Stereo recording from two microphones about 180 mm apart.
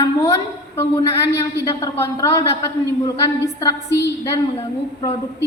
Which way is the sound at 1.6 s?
15° left (ahead or behind).